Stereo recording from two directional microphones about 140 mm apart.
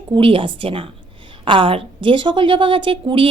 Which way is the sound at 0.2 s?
40° right (ahead or behind).